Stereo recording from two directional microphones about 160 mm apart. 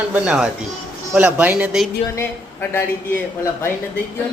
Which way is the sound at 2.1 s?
15° left (ahead or behind).